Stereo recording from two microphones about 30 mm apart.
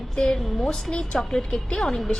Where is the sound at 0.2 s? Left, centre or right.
Left.